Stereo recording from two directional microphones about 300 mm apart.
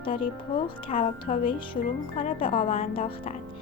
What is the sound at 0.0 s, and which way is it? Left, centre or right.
Speech, centre.